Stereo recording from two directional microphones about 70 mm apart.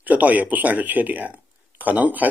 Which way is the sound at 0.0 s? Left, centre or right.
Right.